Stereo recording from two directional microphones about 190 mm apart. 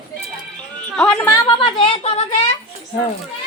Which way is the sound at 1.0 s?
10° left (ahead or behind).